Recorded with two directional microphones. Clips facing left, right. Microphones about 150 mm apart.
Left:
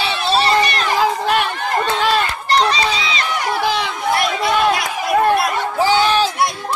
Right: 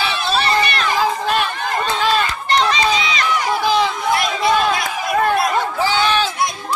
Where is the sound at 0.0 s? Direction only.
30° left (ahead or behind).